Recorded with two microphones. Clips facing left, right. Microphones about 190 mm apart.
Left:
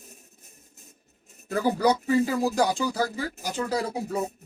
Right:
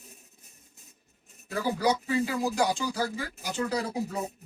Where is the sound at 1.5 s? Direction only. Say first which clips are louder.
Left 4 dB; 45° left (ahead or behind).